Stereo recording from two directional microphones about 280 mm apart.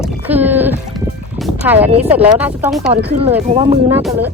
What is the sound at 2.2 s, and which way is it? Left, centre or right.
Speech, centre.